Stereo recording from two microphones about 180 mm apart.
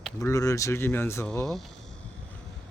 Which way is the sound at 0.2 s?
15° left (ahead or behind).